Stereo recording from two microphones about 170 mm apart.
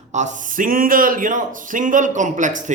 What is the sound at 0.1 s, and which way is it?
A man's voice, 50° right (ahead or behind).